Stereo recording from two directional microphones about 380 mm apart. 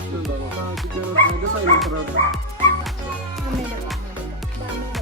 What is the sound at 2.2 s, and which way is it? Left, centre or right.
Music, left.